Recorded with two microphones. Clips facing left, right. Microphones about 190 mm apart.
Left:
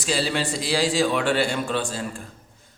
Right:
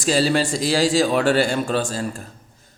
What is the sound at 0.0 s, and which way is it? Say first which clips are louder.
A man's voice: right 6 dB; 40° right (ahead or behind).